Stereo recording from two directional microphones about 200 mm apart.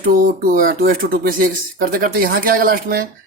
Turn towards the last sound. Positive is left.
turn(degrees=-45)  # may be behind; listen again after turning